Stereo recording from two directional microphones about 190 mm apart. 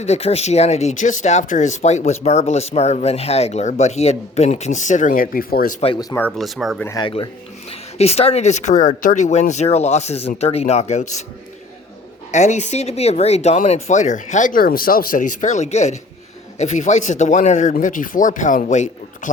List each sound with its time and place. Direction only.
0.0 s speech: 35° left (ahead or behind); by 5.7 s 50° left (ahead or behind)
5.8 s speech: 25° left (ahead or behind)
6.2 s speech: centre (ahead or behind)
6.8 s speech: 20° left (ahead or behind)
7.7 s speech: 35° left (ahead or behind)
12.3 s speech: 40° left (ahead or behind)